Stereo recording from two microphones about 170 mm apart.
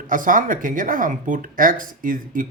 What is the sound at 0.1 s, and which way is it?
Speech, 50° right (ahead or behind).